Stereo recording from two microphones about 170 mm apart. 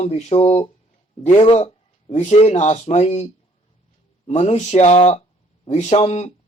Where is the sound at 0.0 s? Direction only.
40° left (ahead or behind).